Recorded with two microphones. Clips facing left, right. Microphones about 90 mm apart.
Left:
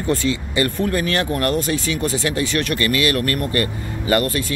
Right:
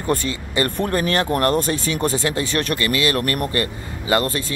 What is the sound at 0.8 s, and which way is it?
Speech, 35° right (ahead or behind).